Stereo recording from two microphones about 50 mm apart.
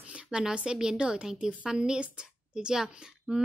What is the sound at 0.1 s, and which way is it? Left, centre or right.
A woman's voice, right.